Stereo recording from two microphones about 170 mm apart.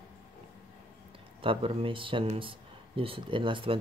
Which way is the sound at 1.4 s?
35° right (ahead or behind).